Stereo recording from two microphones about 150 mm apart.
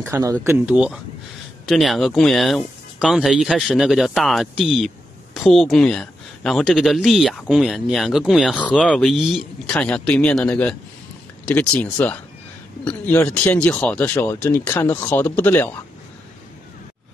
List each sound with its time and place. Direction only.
0.0 s speech: 20° right (ahead or behind)
0.7 s speech: 5° right (ahead or behind); by 15.7 s 15° left (ahead or behind)